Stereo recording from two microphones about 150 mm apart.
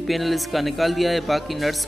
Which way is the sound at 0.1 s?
Centre (ahead or behind).